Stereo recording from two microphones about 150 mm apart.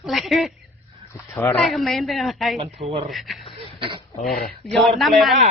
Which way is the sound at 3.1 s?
Centre (ahead or behind).